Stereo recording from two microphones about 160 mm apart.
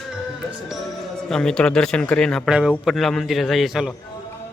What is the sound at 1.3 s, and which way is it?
Speech, 5° left (ahead or behind).